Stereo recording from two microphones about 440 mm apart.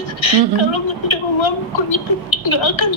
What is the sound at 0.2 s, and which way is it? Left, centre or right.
A woman's voice, left.